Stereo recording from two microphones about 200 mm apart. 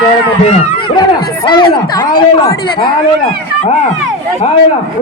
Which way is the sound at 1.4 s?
25° left (ahead or behind).